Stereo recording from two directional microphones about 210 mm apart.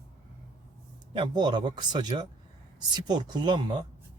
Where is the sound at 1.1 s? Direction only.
20° right (ahead or behind).